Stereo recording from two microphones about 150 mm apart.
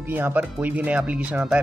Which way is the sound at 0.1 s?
10° right (ahead or behind).